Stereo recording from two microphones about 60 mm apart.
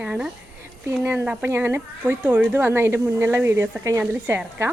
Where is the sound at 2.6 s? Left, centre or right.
Right.